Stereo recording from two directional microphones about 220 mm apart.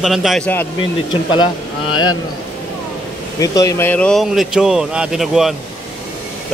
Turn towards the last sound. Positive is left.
turn(degrees=0)  # may be behind; listen again after turning